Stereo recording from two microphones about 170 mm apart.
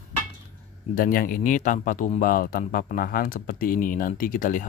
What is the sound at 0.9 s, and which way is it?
Speech, 55° left (ahead or behind).